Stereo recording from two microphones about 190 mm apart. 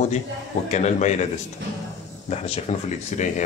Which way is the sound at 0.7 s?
40° left (ahead or behind).